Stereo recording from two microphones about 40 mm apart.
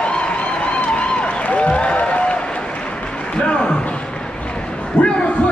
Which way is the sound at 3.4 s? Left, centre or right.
Left.